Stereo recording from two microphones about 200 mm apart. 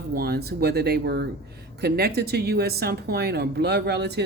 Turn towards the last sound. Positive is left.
turn(degrees=-55)  # may be behind; listen again after turning